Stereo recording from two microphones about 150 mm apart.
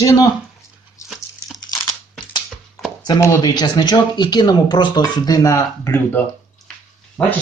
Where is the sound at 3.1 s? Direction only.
20° left (ahead or behind).